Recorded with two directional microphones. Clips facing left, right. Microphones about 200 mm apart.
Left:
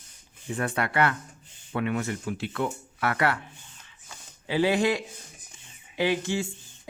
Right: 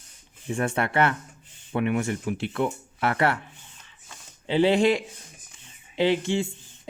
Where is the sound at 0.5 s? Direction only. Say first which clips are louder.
Right 3 dB; 25° right (ahead or behind).